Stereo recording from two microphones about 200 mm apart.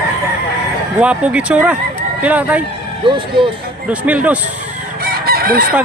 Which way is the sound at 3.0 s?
25° right (ahead or behind).